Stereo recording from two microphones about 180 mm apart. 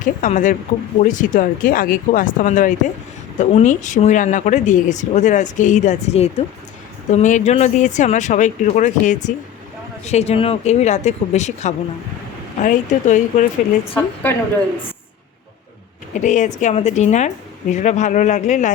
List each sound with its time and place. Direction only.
0.0 s speech: 45° left (ahead or behind)
13.9 s a woman's voice: 10° left (ahead or behind)
16.1 s speech: 45° left (ahead or behind)